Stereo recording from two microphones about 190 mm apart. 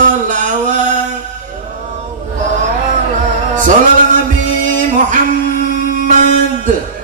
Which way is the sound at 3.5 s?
45° right (ahead or behind).